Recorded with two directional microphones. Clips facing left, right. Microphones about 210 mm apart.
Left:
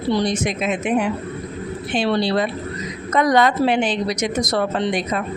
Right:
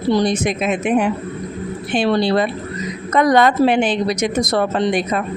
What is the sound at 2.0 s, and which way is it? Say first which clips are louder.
A woman's voice: right 3 dB; 50° right (ahead or behind).